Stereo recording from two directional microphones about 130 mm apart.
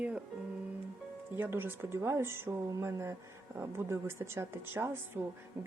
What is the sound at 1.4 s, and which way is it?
Speech, 15° right (ahead or behind).